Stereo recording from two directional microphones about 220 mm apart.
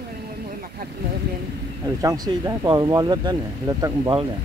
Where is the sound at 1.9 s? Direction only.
15° right (ahead or behind).